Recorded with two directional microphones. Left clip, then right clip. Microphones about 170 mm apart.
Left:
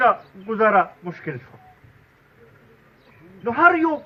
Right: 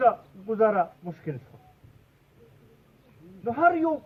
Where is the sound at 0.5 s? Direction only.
Centre (ahead or behind).